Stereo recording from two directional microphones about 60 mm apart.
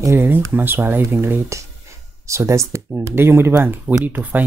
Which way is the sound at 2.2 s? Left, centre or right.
Right.